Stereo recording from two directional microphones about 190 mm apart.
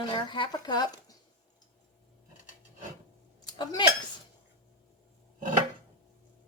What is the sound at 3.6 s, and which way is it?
Speech, 20° left (ahead or behind).